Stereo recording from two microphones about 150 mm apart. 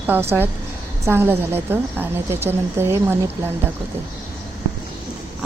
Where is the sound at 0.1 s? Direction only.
15° right (ahead or behind).